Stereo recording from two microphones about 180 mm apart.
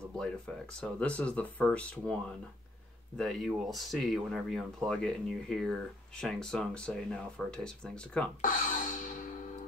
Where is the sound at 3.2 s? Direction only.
Centre (ahead or behind).